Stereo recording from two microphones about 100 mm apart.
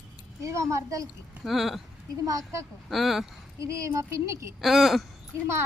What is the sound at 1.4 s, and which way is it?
Speech, centre (ahead or behind).